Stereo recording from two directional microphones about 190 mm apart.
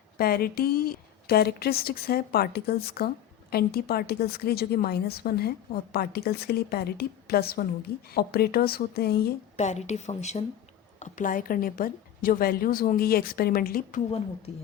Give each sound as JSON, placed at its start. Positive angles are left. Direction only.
{"t": 0.2, "sound": "a woman's voice", "side_deg": 50}
{"t": 9.6, "sound": "a woman's voice", "side_deg": 35}